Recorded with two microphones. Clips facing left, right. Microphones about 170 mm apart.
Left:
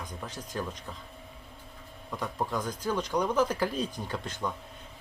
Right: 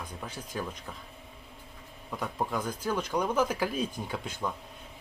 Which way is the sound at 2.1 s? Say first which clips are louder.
Even; 5° right (ahead or behind).